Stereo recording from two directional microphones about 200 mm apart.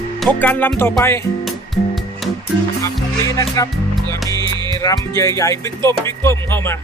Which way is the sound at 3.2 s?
15° left (ahead or behind).